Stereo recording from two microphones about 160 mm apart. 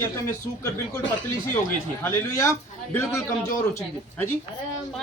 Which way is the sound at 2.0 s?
15° left (ahead or behind).